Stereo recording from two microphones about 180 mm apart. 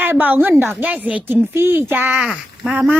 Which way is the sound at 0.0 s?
10° right (ahead or behind).